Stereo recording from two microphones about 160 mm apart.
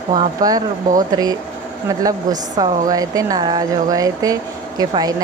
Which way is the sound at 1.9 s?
20° right (ahead or behind).